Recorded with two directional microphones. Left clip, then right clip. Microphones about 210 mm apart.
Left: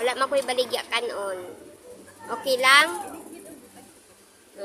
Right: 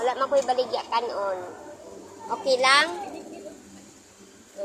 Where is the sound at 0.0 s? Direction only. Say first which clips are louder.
Right 1 dB; 25° left (ahead or behind).